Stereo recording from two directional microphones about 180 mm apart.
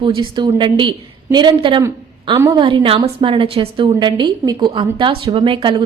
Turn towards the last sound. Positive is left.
turn(degrees=-30)  # may be behind; listen again after turning